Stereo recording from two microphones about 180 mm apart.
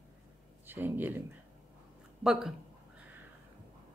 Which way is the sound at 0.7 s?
10° right (ahead or behind).